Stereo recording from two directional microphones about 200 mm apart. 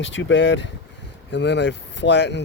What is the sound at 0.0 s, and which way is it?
Speech, 70° left (ahead or behind).